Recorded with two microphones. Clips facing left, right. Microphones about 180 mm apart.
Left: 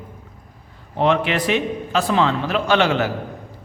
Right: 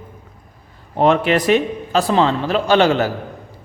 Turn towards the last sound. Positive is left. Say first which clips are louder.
# right 4 dB
turn(degrees=-35)  # may be behind; listen again after turning